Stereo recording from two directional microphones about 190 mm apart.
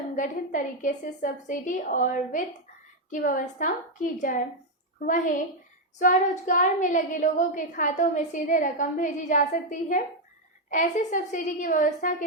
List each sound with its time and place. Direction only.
0.2 s a woman's voice: 40° left (ahead or behind)